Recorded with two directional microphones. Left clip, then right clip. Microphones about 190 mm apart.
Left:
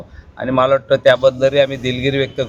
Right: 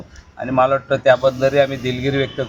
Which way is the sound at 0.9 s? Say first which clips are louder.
Left 2 dB; 10° left (ahead or behind).